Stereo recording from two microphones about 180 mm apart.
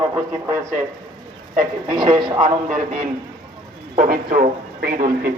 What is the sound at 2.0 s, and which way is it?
Speech, 25° right (ahead or behind).